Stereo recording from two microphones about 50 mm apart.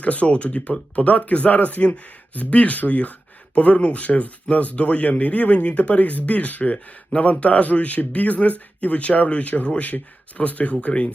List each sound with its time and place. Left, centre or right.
0.0 s speech: left